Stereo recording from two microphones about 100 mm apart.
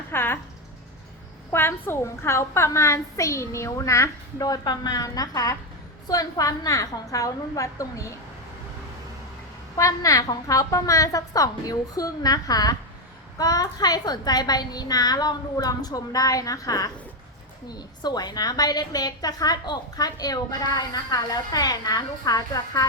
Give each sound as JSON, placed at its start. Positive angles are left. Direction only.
{"t": 0.1, "sound": "a sound", "side_deg": 20}
{"t": 1.5, "sound": "a woman's voice", "side_deg": 25}
{"t": 9.7, "sound": "a woman's voice", "side_deg": 35}